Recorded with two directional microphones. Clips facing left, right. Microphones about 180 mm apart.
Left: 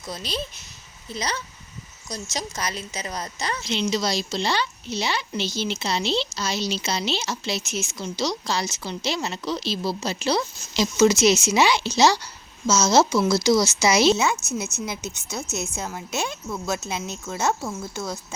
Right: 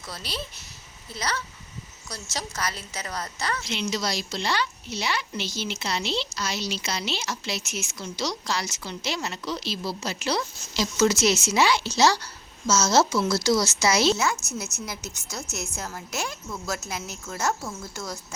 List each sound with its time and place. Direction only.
0.0 s a woman's voice: 20° left (ahead or behind)